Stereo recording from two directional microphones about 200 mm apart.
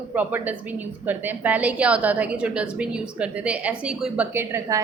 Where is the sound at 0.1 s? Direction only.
10° right (ahead or behind).